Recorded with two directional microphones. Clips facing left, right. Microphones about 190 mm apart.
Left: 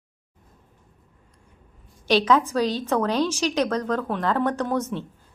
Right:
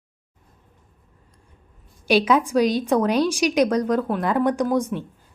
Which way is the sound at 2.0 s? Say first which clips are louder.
Right 1 dB; 10° right (ahead or behind).